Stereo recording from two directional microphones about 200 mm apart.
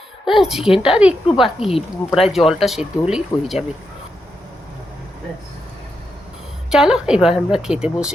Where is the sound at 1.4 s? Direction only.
30° left (ahead or behind).